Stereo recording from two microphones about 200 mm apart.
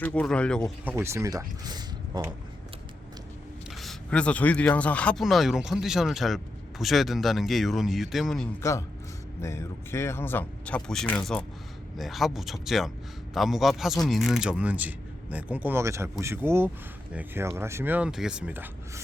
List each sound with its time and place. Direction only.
0.0 s speech: 5° left (ahead or behind)
0.9 s speech: 15° right (ahead or behind)
3.8 s speech: 5° left (ahead or behind)
9.4 s speech: 15° left (ahead or behind); by 19.0 s 10° right (ahead or behind)